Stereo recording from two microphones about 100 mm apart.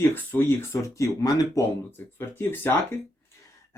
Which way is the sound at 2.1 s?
20° left (ahead or behind).